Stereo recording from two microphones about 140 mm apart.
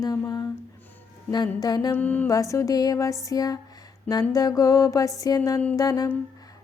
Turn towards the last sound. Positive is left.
turn(degrees=25)  # may be behind; listen again after turning